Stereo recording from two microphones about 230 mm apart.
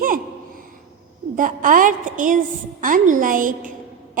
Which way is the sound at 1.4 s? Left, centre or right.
Right.